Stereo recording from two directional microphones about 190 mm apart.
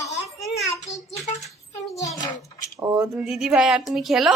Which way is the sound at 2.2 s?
20° left (ahead or behind).